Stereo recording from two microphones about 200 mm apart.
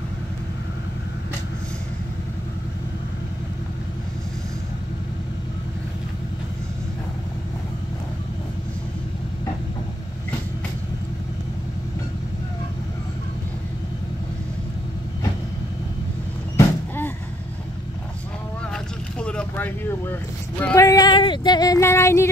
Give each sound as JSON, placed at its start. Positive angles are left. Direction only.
{"t": 16.5, "sound": "vehicle", "side_deg": 10}
{"t": 18.7, "sound": "vehicle", "side_deg": 5}
{"t": 20.7, "sound": "a sound", "side_deg": 15}